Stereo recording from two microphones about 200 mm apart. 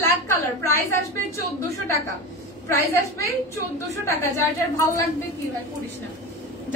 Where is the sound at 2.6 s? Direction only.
15° left (ahead or behind).